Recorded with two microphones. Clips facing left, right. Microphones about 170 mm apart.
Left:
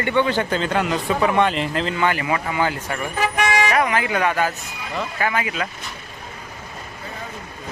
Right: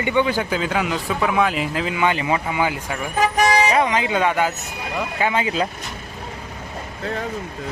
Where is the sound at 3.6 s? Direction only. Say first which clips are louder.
Right 1 dB; 20° right (ahead or behind).